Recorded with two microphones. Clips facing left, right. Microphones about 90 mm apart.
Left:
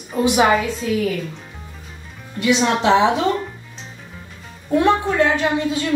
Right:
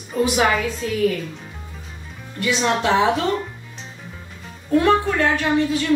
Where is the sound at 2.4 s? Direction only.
20° left (ahead or behind).